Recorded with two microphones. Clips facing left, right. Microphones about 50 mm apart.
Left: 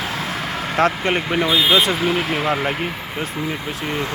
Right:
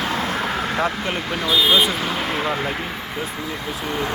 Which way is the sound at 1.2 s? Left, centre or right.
Centre.